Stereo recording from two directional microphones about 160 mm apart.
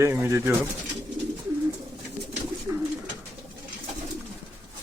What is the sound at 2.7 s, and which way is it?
Bird, 15° right (ahead or behind).